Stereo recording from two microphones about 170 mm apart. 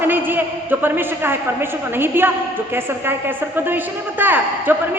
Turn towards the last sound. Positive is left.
turn(degrees=-10)  # may be behind; listen again after turning